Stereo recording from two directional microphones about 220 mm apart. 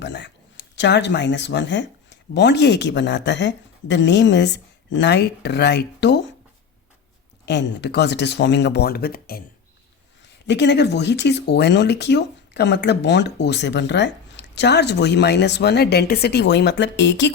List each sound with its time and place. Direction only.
0.0 s speech: 50° left (ahead or behind)
7.4 s speech: 50° left (ahead or behind)
10.4 s speech: 50° left (ahead or behind)